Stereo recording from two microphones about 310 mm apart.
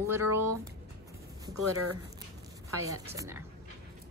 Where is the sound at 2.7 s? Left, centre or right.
Centre.